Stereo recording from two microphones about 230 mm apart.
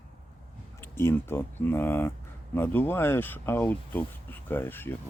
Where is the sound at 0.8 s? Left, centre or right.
Centre.